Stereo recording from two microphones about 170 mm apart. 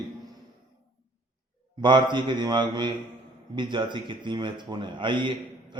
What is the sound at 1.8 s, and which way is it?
Speech, 25° right (ahead or behind).